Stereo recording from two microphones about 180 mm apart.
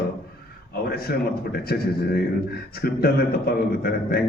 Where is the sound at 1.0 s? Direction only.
60° left (ahead or behind).